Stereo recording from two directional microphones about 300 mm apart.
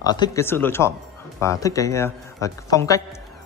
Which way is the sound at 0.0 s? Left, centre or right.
Centre.